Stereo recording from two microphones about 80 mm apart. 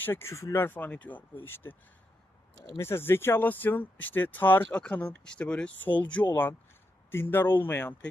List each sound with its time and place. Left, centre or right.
0.0 s speech: left
2.7 s speech: left
7.1 s speech: left